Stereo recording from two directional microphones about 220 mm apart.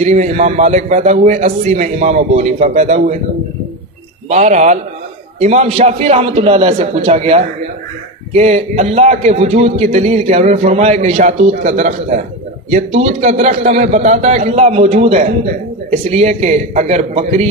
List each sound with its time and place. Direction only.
0.0 s a man's voice: 30° right (ahead or behind)
4.3 s a man's voice: 30° right (ahead or behind)